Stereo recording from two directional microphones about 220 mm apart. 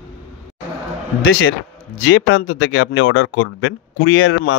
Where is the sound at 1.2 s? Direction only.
50° left (ahead or behind).